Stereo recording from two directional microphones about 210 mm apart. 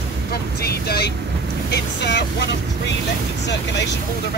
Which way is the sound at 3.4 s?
55° left (ahead or behind).